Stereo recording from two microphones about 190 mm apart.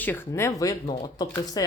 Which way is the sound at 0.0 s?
10° left (ahead or behind).